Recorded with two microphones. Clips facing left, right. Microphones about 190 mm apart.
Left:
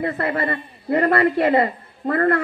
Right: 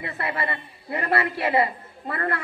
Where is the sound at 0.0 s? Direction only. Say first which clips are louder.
Left 7 dB; 50° left (ahead or behind).